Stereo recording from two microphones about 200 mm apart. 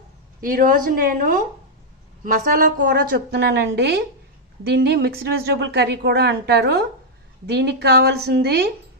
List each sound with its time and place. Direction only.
0.4 s a woman's voice: 45° right (ahead or behind)